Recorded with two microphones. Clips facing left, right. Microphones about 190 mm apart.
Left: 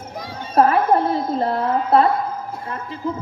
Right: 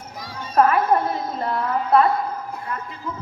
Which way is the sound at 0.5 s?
30° left (ahead or behind).